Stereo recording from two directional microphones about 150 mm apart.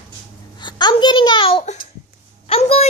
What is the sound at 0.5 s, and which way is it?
Babbling, 30° left (ahead or behind).